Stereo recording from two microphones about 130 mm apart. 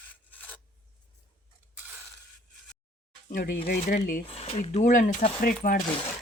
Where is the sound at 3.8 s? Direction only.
90° left.